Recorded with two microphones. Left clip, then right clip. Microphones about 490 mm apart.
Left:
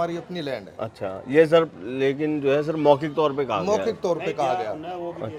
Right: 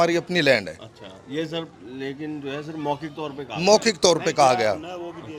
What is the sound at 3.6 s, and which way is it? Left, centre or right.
A man's voice, right.